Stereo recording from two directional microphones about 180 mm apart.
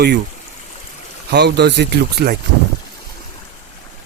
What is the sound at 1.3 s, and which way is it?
Speech, 70° right (ahead or behind).